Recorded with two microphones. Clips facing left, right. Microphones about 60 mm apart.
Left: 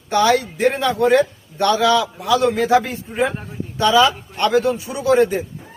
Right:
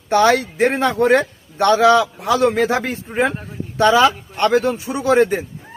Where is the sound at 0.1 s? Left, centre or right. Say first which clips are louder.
Right 2 dB; right.